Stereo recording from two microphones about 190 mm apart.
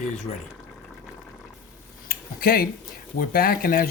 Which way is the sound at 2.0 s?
50° left (ahead or behind).